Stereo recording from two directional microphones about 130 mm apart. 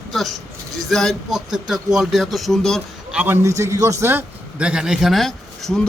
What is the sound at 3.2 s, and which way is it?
A man's voice, 20° right (ahead or behind).